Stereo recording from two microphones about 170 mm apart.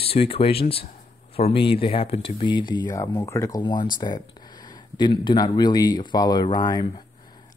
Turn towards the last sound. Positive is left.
turn(degrees=25)  # may be behind; listen again after turning